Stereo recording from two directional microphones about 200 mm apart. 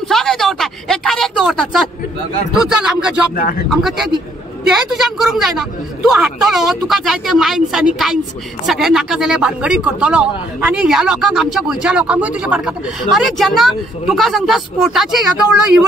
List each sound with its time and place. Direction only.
0.1 s a sound: centre (ahead or behind)
2.5 s speech: centre (ahead or behind)
3.3 s speech: 45° left (ahead or behind)
3.7 s speech: centre (ahead or behind)